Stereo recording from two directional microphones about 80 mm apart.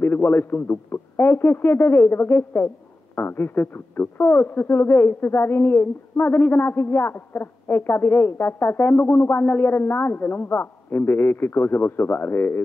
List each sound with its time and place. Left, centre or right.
0.0 s speech: left